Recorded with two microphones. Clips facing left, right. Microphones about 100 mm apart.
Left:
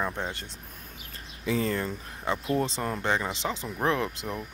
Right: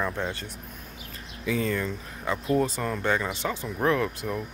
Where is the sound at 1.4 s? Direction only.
35° left (ahead or behind).